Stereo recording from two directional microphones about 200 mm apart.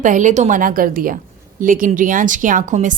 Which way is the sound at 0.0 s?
40° right (ahead or behind).